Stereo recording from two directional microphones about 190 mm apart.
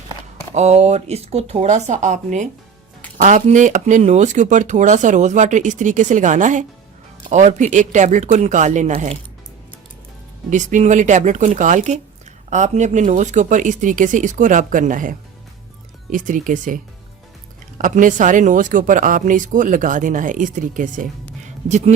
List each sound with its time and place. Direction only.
0.5 s speech: 35° right (ahead or behind)
10.5 s speech: 40° right (ahead or behind)
16.1 s speech: 45° right (ahead or behind)